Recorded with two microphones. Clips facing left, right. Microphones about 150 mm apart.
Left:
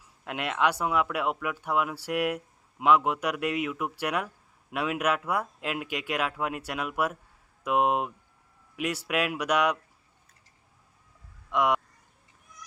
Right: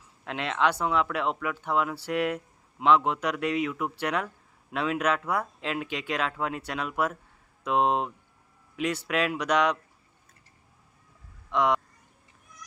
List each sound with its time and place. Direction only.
0.3 s speech: 10° left (ahead or behind)
11.5 s speech: 10° left (ahead or behind)